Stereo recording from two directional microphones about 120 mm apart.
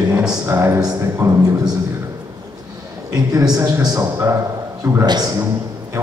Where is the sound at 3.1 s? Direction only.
30° right (ahead or behind).